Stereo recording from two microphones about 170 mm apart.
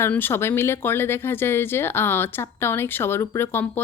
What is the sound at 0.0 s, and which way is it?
Speech, 10° left (ahead or behind).